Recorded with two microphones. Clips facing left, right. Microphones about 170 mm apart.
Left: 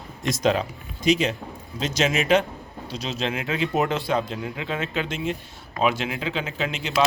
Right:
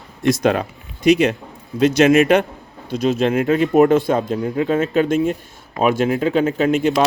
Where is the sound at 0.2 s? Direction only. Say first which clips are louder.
Right 6 dB; 60° right (ahead or behind).